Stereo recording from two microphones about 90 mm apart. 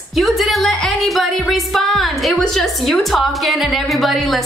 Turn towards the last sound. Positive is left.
turn(degrees=0)  # may be behind; listen again after turning